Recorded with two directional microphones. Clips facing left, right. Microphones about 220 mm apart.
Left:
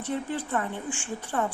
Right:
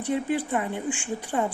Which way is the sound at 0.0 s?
15° right (ahead or behind).